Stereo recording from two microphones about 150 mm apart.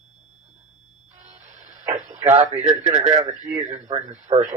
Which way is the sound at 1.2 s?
50° right (ahead or behind).